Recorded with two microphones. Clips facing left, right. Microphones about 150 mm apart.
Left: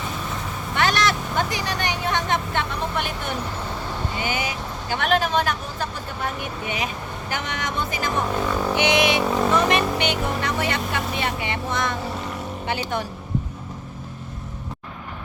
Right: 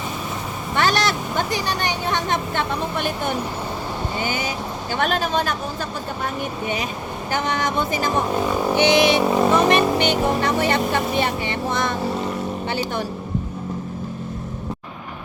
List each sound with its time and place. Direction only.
0.8 s speech: 35° right (ahead or behind)
4.2 s speech: 35° right (ahead or behind)
7.3 s speech: 35° right (ahead or behind)
8.3 s speech: 15° right (ahead or behind)
8.7 s speech: 30° right (ahead or behind)
9.2 s speech: 10° right (ahead or behind)
9.5 s speech: 35° right (ahead or behind)